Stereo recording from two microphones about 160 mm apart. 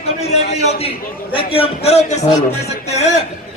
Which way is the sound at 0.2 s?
40° left (ahead or behind).